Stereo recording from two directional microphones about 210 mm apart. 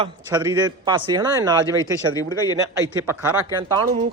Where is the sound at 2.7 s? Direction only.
10° right (ahead or behind).